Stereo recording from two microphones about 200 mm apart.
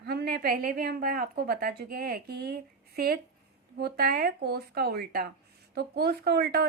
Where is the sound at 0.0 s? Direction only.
55° right (ahead or behind).